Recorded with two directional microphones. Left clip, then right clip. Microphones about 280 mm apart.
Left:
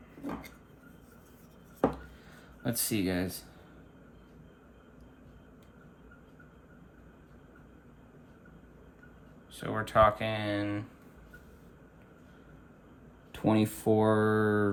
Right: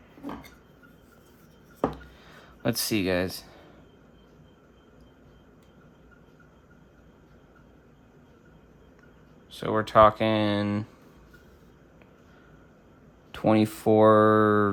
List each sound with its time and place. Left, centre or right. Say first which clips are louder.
2.6 s speech: right 6 dB; centre
9.5 s speech: right 7 dB; centre
13.3 s speech: right 6 dB; right